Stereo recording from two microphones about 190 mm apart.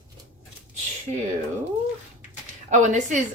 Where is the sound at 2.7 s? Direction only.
40° right (ahead or behind).